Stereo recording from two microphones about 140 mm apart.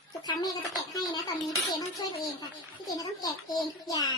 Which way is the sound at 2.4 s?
30° left (ahead or behind).